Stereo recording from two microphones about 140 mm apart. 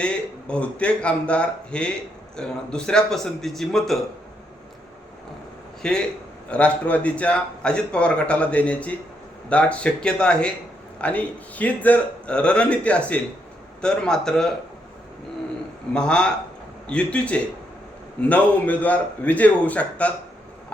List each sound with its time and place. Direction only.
0.0 s a man's voice: 5° left (ahead or behind)
5.8 s a man's voice: 5° left (ahead or behind)
15.9 s a man's voice: 5° left (ahead or behind)